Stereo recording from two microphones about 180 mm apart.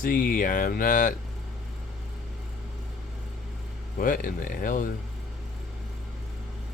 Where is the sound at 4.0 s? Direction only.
50° left (ahead or behind).